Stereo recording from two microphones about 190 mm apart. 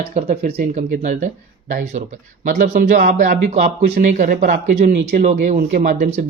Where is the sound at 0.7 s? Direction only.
40° right (ahead or behind); by 5.1 s 55° right (ahead or behind).